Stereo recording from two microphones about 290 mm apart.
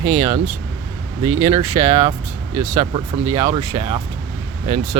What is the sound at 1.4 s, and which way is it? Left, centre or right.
Speech, centre.